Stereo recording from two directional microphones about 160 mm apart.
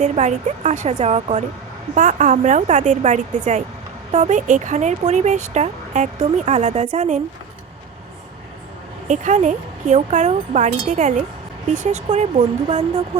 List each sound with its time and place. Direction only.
0.0 s speech: 45° right (ahead or behind)
9.0 s speech: 50° right (ahead or behind)